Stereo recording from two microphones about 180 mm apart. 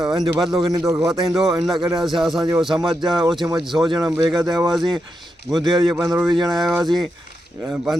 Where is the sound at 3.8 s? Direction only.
25° right (ahead or behind).